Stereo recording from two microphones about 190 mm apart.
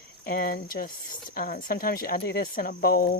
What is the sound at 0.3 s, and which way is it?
Speech, 50° left (ahead or behind).